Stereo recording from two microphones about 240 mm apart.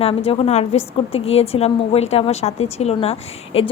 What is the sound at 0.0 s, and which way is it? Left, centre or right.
A woman's voice, left.